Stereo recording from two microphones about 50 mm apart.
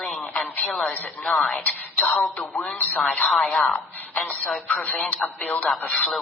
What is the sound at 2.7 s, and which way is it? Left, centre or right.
Speech, left.